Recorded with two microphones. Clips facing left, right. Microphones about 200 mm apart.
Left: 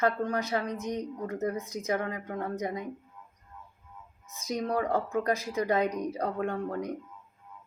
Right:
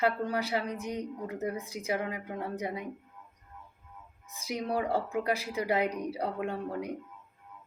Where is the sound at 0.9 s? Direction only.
15° right (ahead or behind).